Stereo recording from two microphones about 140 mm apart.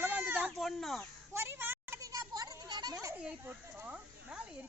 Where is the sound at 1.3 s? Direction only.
15° right (ahead or behind).